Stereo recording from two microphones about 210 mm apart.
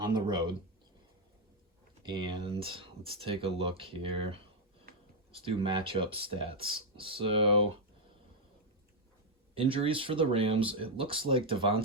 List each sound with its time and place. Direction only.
0.0 s speech: 20° right (ahead or behind)
2.0 s speech: 25° right (ahead or behind)
9.6 s speech: 25° right (ahead or behind)